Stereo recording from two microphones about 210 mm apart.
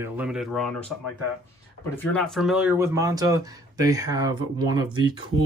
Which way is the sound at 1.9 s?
5° left (ahead or behind).